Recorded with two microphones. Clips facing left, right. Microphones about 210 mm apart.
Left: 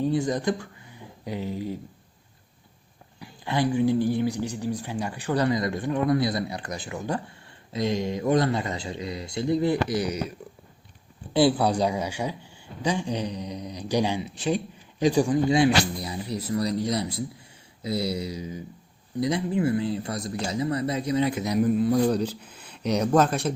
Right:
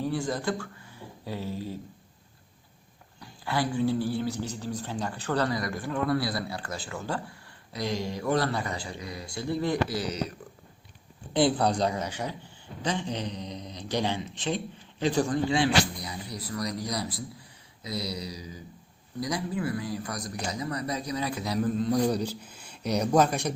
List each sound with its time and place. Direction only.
0.0 s speech: 20° left (ahead or behind)
3.2 s speech: 20° left (ahead or behind)
11.3 s speech: 5° left (ahead or behind)
22.0 s speech: 10° right (ahead or behind)